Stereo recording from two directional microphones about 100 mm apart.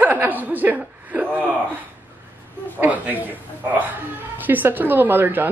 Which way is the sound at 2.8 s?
15° right (ahead or behind).